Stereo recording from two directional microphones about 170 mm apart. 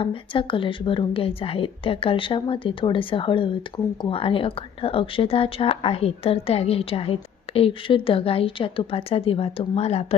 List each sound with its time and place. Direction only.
0.0 s a woman's voice: 30° left (ahead or behind)